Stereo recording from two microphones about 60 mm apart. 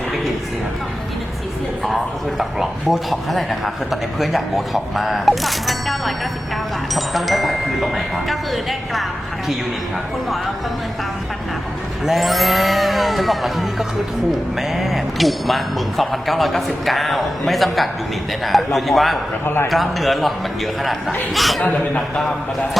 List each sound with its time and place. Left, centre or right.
2.4 s speech: centre
12.0 s speech: centre
21.3 s speech: centre
21.6 s a man's voice: left
22.1 s a man's voice: centre